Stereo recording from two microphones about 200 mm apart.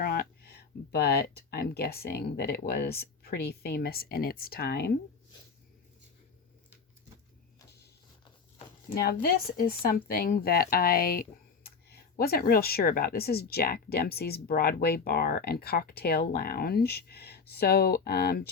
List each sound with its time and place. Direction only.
0.0 s a sound: 50° left (ahead or behind)
0.9 s speech: 55° left (ahead or behind)
9.0 s speech: 50° left (ahead or behind)